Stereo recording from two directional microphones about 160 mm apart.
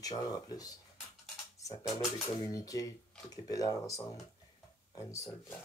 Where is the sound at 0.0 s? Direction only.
25° left (ahead or behind).